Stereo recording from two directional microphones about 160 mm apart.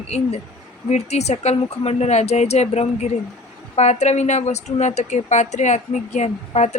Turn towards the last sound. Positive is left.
turn(degrees=45)  # may be behind; listen again after turning